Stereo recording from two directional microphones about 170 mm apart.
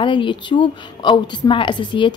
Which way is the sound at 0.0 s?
30° left (ahead or behind).